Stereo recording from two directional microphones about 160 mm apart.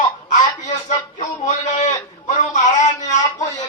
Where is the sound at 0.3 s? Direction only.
50° left (ahead or behind).